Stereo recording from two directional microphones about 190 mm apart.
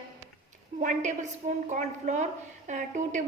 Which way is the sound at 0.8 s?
40° right (ahead or behind).